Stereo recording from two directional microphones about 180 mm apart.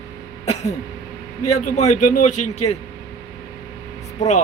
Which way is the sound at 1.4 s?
40° left (ahead or behind).